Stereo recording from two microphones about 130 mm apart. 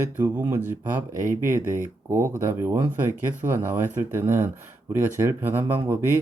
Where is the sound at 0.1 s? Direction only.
15° right (ahead or behind).